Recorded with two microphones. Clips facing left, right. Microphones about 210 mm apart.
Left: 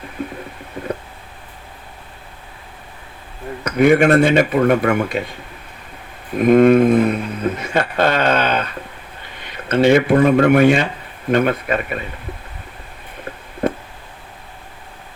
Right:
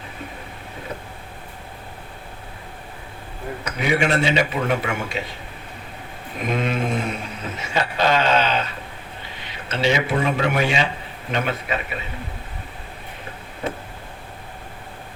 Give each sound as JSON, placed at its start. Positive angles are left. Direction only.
{"t": 0.2, "sound": "a sound", "side_deg": 55}
{"t": 3.8, "sound": "speech", "side_deg": 50}
{"t": 6.3, "sound": "speech", "side_deg": 50}